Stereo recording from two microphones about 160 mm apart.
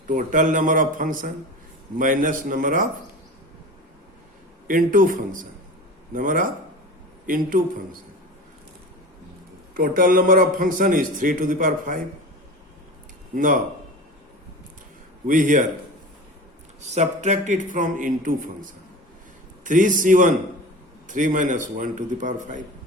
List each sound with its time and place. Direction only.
0.1 s a man's voice: 55° right (ahead or behind)
4.7 s a man's voice: 60° right (ahead or behind)
9.7 s a man's voice: 60° right (ahead or behind)
13.3 s a man's voice: 55° right (ahead or behind)
15.3 s a man's voice: 55° right (ahead or behind)
16.8 s a man's voice: 45° right (ahead or behind)